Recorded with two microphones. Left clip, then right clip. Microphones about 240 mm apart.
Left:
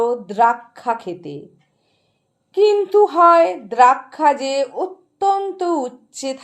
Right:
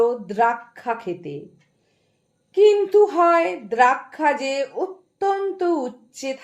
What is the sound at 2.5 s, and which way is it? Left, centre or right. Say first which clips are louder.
Speech: even; left.